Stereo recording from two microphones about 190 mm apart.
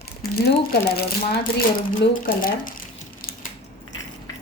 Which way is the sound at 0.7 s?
55° left (ahead or behind).